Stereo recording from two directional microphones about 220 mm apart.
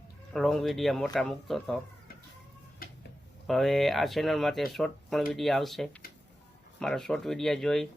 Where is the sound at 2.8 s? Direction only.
40° left (ahead or behind).